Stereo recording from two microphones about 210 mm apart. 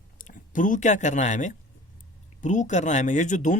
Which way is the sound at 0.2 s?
40° left (ahead or behind).